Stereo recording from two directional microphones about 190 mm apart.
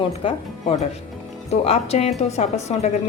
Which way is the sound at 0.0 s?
30° left (ahead or behind).